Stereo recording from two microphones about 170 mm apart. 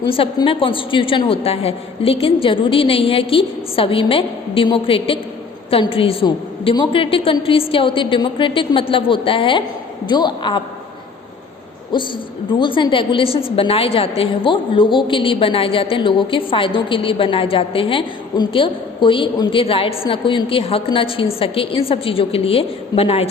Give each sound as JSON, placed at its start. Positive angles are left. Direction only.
{"t": 0.1, "sound": "a woman's voice", "side_deg": 30}
{"t": 11.9, "sound": "a woman's voice", "side_deg": 25}